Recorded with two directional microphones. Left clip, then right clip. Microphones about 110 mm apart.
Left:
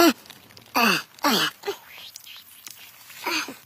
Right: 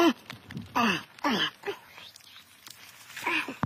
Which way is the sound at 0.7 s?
75° left (ahead or behind).